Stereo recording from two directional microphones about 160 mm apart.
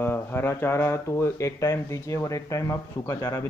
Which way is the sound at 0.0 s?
15° left (ahead or behind).